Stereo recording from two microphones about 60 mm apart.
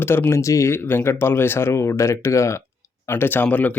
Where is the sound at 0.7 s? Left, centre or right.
Left.